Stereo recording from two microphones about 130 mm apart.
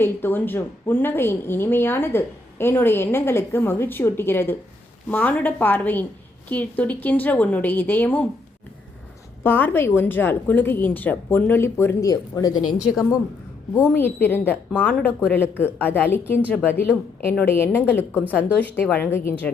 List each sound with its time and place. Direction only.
0.0 s a woman's voice: 15° left (ahead or behind)
9.4 s a woman's voice: 15° left (ahead or behind)
13.7 s a woman's voice: 15° left (ahead or behind)